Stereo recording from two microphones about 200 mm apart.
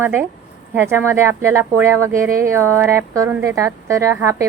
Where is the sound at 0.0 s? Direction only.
10° right (ahead or behind).